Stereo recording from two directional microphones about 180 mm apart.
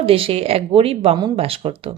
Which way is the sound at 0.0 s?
30° right (ahead or behind).